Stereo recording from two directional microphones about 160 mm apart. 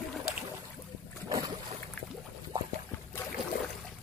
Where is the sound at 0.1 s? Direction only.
5° right (ahead or behind).